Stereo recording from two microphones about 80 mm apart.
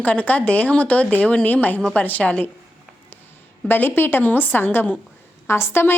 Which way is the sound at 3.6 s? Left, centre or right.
Left.